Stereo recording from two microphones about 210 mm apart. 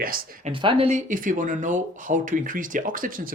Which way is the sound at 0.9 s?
35° right (ahead or behind).